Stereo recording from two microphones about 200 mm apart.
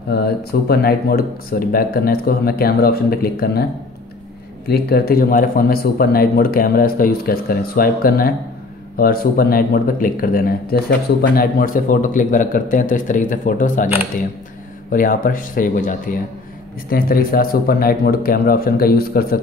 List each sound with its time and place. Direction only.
0.1 s speech: 50° left (ahead or behind)
4.6 s speech: 50° left (ahead or behind)
14.9 s speech: 45° left (ahead or behind)